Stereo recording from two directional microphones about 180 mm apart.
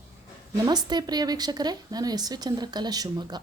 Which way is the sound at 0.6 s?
20° right (ahead or behind).